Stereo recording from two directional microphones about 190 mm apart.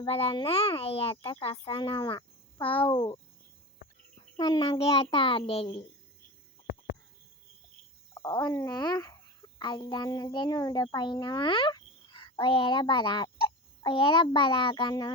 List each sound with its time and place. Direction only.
0.1 s a child's voice: 30° left (ahead or behind)
4.4 s a child's voice: 25° left (ahead or behind)
8.1 s a child's voice: 20° left (ahead or behind)